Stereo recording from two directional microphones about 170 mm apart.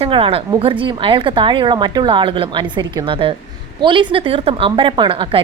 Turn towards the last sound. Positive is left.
turn(degrees=-30)  # may be behind; listen again after turning